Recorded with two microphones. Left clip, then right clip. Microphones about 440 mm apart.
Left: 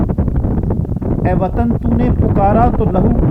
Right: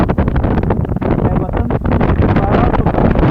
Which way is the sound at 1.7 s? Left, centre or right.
Right.